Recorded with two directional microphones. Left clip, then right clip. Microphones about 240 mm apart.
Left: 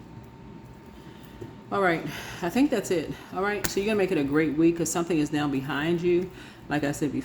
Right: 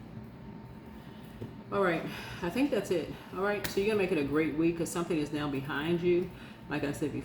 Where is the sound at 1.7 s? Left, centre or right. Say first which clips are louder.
Left 5 dB; left.